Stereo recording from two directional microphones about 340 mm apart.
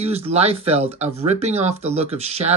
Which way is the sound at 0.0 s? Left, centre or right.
Centre.